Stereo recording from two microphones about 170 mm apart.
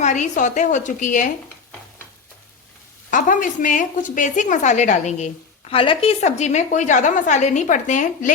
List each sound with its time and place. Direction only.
0.0 s a woman's voice: 45° left (ahead or behind)
3.1 s a woman's voice: 50° left (ahead or behind)
5.7 s a woman's voice: 30° left (ahead or behind); by 8.3 s 50° left (ahead or behind)